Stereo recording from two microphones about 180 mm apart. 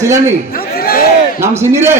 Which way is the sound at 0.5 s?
55° left (ahead or behind).